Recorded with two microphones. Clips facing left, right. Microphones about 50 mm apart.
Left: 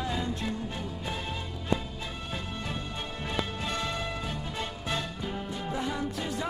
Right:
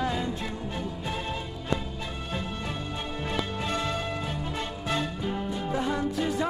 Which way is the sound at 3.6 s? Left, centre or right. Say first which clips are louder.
Right 3 dB; centre.